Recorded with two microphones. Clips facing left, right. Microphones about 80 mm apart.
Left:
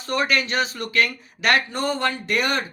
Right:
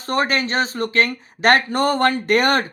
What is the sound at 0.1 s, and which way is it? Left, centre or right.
Speech, right.